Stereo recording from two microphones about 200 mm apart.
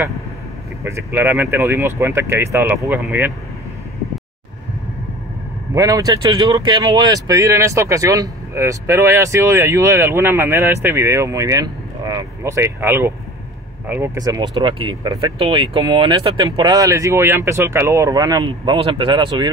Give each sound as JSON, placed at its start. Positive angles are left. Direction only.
{"t": 0.8, "sound": "speech", "side_deg": -10}
{"t": 5.8, "sound": "speech", "side_deg": -15}